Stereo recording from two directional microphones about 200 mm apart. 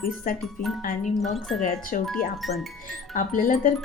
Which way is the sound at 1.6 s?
40° left (ahead or behind).